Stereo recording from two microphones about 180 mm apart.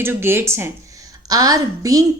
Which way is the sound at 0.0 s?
15° right (ahead or behind).